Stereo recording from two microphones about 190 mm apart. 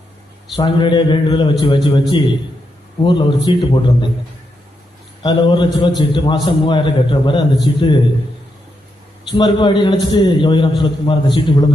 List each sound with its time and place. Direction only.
0.5 s a man's voice: 25° left (ahead or behind)
5.2 s a man's voice: 25° left (ahead or behind)
9.3 s a man's voice: 25° left (ahead or behind)